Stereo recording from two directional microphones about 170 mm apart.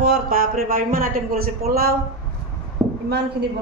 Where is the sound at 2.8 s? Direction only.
20° right (ahead or behind).